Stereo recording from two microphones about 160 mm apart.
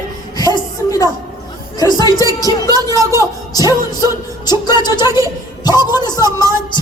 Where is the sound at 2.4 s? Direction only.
25° left (ahead or behind).